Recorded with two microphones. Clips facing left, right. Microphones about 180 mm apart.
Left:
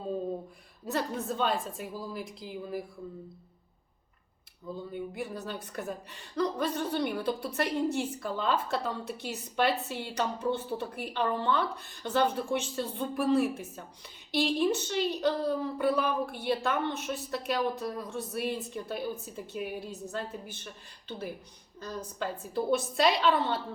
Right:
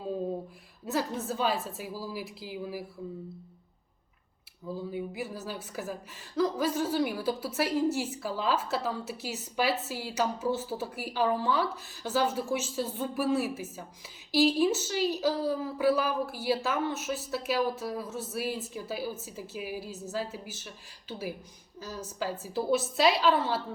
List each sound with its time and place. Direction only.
0.9 s a woman's voice: 5° right (ahead or behind)
4.6 s a woman's voice: 5° right (ahead or behind)